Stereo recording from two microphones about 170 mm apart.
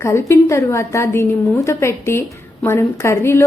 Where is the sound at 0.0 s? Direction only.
15° left (ahead or behind).